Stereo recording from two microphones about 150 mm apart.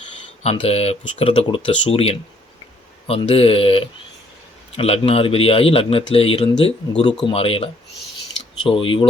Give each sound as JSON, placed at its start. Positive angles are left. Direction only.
{"t": 0.4, "sound": "speech", "side_deg": 40}